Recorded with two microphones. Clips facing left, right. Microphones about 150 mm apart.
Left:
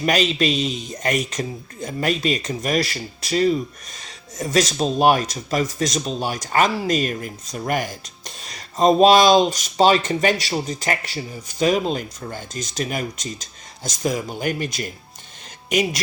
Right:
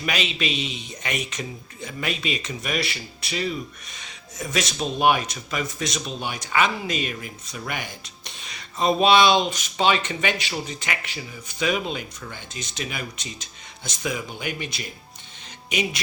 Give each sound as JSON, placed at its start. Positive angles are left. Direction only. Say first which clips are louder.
{"t": 0.0, "sound": "a man's voice", "louder": "left 8 dB", "side_deg": 40}